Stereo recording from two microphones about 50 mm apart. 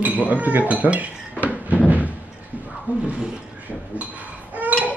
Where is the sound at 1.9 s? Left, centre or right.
Right.